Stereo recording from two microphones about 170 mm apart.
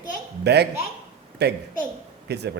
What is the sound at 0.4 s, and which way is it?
Speech, 80° right.